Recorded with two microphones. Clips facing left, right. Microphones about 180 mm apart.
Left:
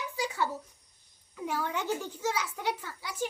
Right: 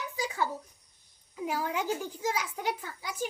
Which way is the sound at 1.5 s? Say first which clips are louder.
Even; 10° right (ahead or behind).